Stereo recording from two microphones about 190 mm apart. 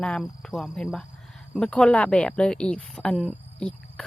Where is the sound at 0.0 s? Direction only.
5° left (ahead or behind).